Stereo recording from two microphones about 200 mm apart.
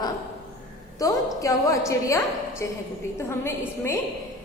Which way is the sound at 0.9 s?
15° left (ahead or behind).